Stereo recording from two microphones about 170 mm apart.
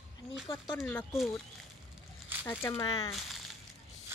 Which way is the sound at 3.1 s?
Centre (ahead or behind).